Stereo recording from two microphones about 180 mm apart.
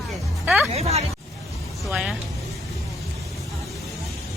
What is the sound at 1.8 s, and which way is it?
Vehicle, 5° right (ahead or behind).